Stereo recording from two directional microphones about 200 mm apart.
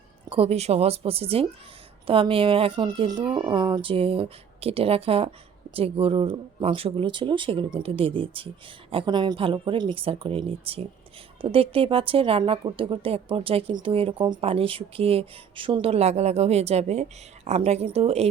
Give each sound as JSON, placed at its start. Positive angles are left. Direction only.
{"t": 0.3, "sound": "speech", "side_deg": -30}